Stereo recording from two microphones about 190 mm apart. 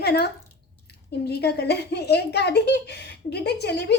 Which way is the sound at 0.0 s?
60° left (ahead or behind).